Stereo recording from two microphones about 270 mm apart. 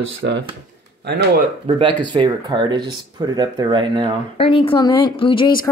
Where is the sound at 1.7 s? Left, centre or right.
Right.